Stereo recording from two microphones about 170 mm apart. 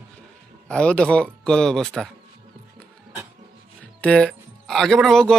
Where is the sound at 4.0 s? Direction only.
5° left (ahead or behind).